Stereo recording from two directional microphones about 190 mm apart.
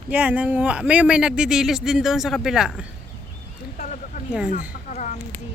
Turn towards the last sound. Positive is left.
turn(degrees=40)  # may be behind; listen again after turning